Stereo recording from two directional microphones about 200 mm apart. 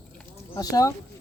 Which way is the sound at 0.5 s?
20° left (ahead or behind).